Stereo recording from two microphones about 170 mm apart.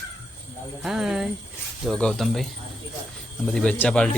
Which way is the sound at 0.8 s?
5° right (ahead or behind).